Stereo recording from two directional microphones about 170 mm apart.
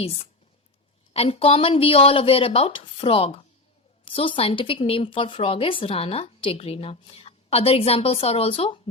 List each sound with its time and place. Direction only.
0.0 s a woman's voice: 35° left (ahead or behind)